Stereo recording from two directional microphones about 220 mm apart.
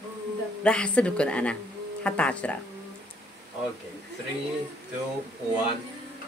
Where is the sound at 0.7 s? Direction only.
5° left (ahead or behind).